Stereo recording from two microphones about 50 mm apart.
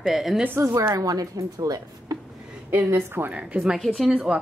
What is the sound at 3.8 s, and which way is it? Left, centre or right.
Speech, centre.